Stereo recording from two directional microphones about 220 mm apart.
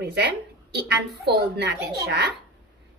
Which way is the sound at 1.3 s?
45° right (ahead or behind).